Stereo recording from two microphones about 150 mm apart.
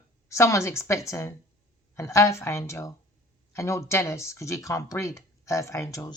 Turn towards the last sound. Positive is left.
turn(degrees=20)  # may be behind; listen again after turning